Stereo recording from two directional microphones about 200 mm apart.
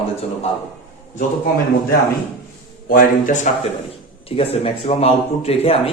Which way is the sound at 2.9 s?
40° left (ahead or behind).